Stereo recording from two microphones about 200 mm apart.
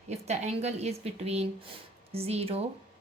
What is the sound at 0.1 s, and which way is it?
A woman's voice, 35° right (ahead or behind).